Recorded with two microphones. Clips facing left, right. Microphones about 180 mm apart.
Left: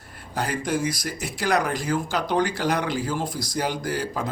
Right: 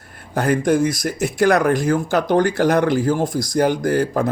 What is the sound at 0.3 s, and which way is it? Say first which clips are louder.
Speech: right 9 dB; 50° right (ahead or behind).